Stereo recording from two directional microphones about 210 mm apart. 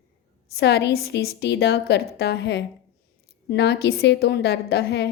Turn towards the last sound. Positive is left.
turn(degrees=55)  # may be behind; listen again after turning